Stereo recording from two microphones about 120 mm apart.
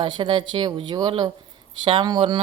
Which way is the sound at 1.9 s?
40° right (ahead or behind).